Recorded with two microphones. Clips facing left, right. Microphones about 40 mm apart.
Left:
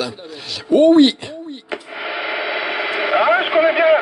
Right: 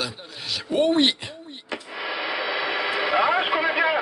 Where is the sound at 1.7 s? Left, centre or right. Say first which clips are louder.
Left 3 dB; left.